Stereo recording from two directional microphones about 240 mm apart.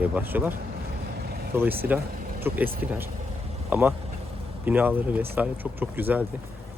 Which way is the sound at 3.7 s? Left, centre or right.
Centre.